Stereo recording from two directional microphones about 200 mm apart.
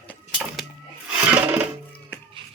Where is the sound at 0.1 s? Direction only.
5° left (ahead or behind).